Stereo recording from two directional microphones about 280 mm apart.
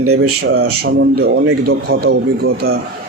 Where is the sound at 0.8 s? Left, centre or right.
Right.